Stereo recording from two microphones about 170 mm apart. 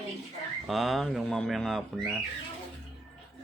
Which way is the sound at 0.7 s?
Centre (ahead or behind).